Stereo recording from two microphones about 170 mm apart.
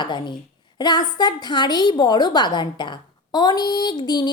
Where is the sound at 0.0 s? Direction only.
25° left (ahead or behind).